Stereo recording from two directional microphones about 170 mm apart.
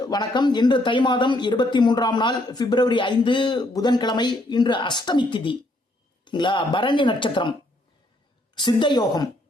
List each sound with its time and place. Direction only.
0.0 s speech: 25° left (ahead or behind)
8.5 s speech: 25° left (ahead or behind)